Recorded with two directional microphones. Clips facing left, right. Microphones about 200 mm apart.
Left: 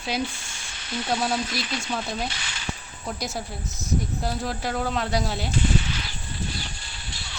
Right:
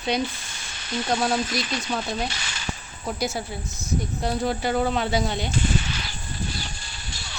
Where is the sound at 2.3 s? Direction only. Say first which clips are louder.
Right 1 dB; 40° right (ahead or behind).